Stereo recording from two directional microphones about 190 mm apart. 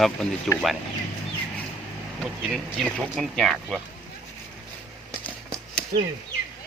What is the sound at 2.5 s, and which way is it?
Speech, centre (ahead or behind).